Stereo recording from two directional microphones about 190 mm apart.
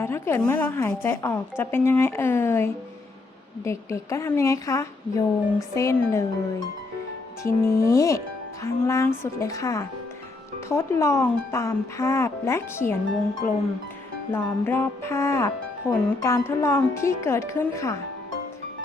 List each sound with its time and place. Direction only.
0.0 s a woman's voice: 10° left (ahead or behind)
7.4 s a woman's voice: 15° left (ahead or behind)